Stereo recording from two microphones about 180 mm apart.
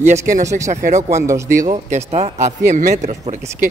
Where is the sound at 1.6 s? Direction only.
40° right (ahead or behind).